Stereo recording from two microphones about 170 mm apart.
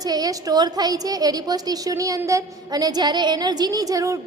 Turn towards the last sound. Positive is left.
turn(degrees=-20)  # may be behind; listen again after turning